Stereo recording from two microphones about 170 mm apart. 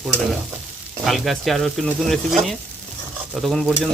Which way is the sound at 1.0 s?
Centre (ahead or behind).